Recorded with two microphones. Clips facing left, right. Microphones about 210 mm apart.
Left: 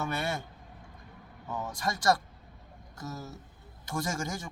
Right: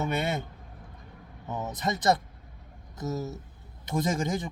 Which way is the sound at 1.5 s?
20° right (ahead or behind).